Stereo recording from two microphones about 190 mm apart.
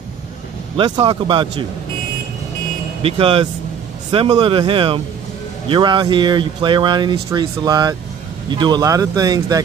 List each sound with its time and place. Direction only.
0.7 s speech: 25° right (ahead or behind)
3.0 s speech: 30° right (ahead or behind)